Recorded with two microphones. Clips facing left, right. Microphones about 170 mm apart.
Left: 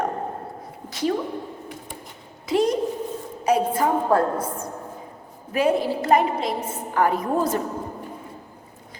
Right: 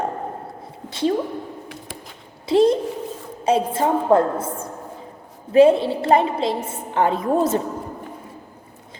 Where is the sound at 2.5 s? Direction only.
30° right (ahead or behind).